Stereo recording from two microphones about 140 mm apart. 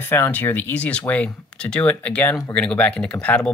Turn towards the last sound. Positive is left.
turn(degrees=10)  # may be behind; listen again after turning